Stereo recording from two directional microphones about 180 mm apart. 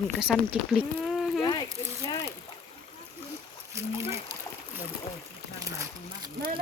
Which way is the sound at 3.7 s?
15° right (ahead or behind).